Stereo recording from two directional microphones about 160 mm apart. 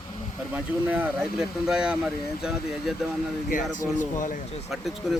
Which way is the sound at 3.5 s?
55° left (ahead or behind).